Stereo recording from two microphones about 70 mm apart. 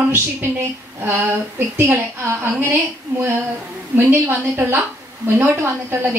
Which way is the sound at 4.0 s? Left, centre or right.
Right.